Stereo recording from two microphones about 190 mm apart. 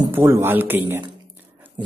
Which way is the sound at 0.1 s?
10° right (ahead or behind).